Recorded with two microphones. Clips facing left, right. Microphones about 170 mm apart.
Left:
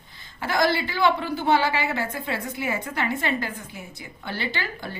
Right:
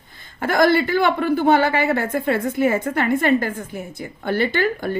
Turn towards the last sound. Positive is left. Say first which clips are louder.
# right 11 dB
turn(degrees=-50)  # may be behind; listen again after turning